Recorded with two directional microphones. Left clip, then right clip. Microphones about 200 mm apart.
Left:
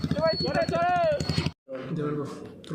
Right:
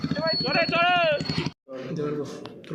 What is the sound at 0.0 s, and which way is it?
Clip-clop, 60° left (ahead or behind).